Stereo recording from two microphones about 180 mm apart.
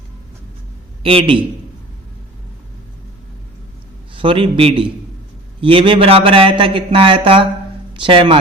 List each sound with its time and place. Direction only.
1.0 s a man's voice: 30° right (ahead or behind)
4.1 s speech: 30° right (ahead or behind)